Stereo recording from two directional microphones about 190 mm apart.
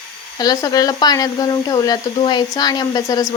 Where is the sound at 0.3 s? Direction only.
20° left (ahead or behind).